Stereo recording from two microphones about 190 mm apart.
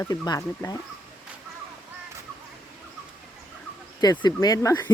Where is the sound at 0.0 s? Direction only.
20° left (ahead or behind).